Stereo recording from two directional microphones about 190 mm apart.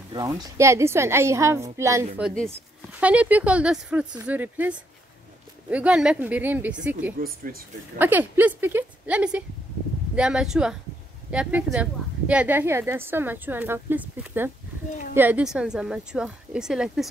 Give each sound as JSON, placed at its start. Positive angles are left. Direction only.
{"t": 0.1, "sound": "a woman's voice", "side_deg": -20}
{"t": 2.2, "sound": "a woman's voice", "side_deg": 0}
{"t": 7.2, "sound": "speech", "side_deg": -50}
{"t": 8.0, "sound": "a woman's voice", "side_deg": -10}